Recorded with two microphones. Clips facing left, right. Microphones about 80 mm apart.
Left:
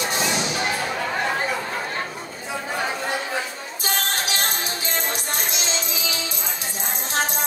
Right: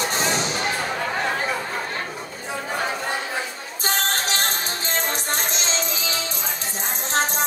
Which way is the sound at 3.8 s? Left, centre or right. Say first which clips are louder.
Right 2 dB; right.